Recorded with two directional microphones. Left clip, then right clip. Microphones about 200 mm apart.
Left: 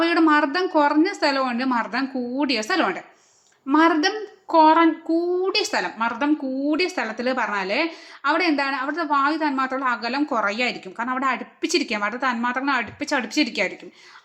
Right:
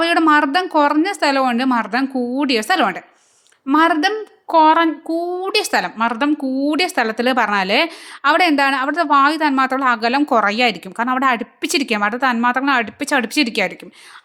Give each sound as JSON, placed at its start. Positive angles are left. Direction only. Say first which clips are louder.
{"t": 0.0, "sound": "a woman's voice", "louder": "right 4 dB", "side_deg": -35}